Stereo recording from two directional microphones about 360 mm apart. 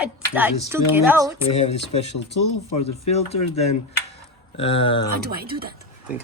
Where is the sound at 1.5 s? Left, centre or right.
Centre.